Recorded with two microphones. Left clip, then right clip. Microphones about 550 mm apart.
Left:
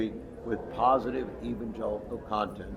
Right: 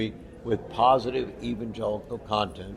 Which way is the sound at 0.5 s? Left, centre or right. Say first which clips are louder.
Right 4 dB; right.